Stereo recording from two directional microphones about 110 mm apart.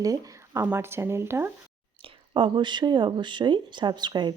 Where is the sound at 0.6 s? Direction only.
20° right (ahead or behind).